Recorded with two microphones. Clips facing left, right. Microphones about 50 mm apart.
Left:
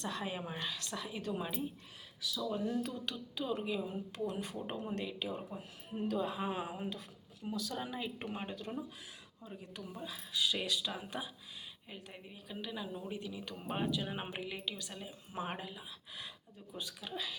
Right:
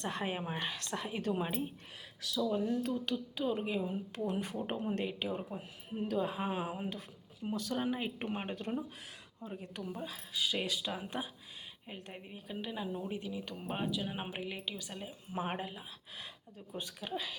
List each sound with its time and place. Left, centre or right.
0.0 s a woman's voice: right
2.9 s speech: right
4.3 s a woman's voice: right
4.6 s speech: right
4.9 s a woman's voice: right
5.3 s speech: right
7.4 s a woman's voice: right
7.7 s a woman's voice: right
9.8 s speech: right; by 14.3 s centre
14.3 s a woman's voice: centre; by 17.3 s right